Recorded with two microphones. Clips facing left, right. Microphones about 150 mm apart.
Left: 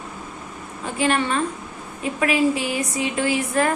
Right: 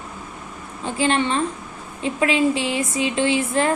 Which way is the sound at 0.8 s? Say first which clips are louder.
Right 1 dB; 30° right (ahead or behind).